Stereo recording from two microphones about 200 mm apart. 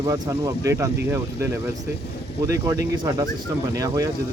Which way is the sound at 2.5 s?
15° right (ahead or behind).